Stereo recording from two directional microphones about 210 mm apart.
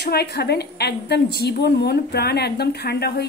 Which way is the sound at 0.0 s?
50° left (ahead or behind).